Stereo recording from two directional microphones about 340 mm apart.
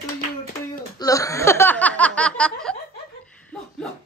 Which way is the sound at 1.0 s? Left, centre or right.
Centre.